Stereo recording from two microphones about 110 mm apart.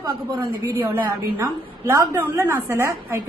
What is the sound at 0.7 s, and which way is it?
Speech, 20° right (ahead or behind).